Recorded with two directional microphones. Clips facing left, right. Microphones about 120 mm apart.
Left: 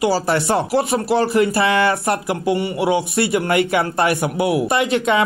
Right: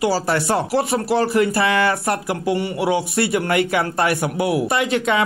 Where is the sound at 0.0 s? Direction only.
20° left (ahead or behind).